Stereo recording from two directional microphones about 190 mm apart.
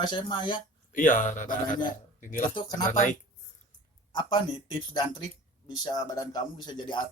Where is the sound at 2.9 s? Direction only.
40° left (ahead or behind).